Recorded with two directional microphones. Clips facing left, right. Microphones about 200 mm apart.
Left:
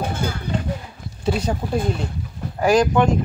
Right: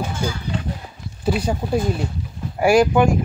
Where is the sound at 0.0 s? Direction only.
55° left (ahead or behind).